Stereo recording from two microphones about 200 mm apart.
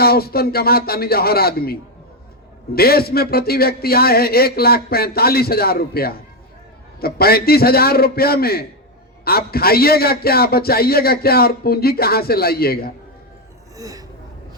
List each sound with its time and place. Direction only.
0.0 s a man's voice: 50° left (ahead or behind)
13.7 s speech: 15° right (ahead or behind)